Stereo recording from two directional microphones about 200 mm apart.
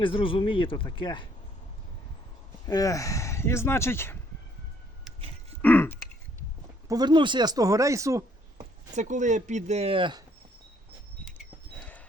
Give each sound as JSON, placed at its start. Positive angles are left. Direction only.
{"t": 0.0, "sound": "speech", "side_deg": 25}
{"t": 2.6, "sound": "speech", "side_deg": 15}
{"t": 5.6, "sound": "speech", "side_deg": 10}
{"t": 6.8, "sound": "speech", "side_deg": -20}
{"t": 8.5, "sound": "speech", "side_deg": -40}